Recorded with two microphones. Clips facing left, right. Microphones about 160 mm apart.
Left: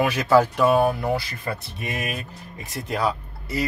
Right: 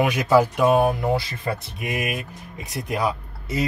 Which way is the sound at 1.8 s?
10° right (ahead or behind).